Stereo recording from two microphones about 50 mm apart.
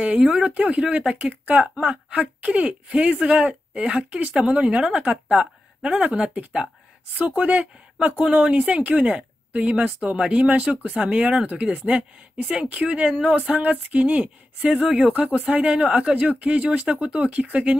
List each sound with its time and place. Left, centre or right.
0.0 s speech: right
1.1 s speech: right; by 10.3 s centre
10.3 s speech: right
15.1 s speech: right
15.7 s speech: centre